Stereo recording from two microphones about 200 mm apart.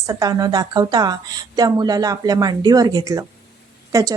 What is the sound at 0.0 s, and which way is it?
A woman's voice, 20° right (ahead or behind).